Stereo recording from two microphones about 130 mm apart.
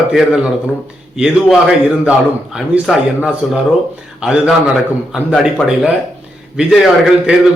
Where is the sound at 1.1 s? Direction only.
5° right (ahead or behind).